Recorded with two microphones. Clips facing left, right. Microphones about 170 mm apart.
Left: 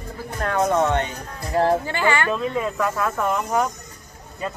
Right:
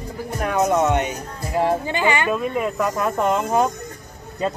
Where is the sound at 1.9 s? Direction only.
20° right (ahead or behind).